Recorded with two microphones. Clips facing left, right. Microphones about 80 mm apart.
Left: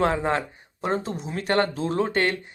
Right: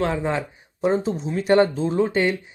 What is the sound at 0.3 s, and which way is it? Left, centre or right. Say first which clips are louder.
Speech: right 1 dB; centre.